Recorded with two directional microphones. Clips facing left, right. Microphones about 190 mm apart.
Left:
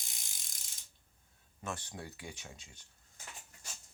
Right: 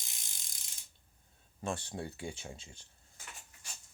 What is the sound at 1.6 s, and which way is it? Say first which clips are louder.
Speech: right 5 dB; 30° right (ahead or behind).